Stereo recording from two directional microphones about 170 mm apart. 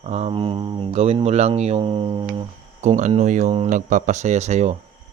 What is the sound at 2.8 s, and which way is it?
Speech, 45° right (ahead or behind).